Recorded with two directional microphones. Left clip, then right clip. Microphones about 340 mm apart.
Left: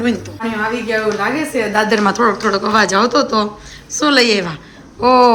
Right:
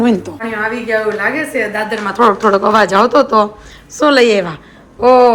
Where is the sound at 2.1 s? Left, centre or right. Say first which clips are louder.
Right 4 dB; centre.